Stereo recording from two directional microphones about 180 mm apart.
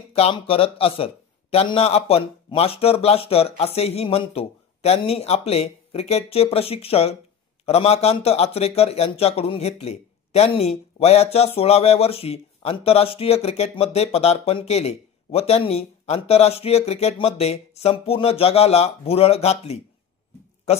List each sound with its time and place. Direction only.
0.1 s a man's voice: 30° left (ahead or behind)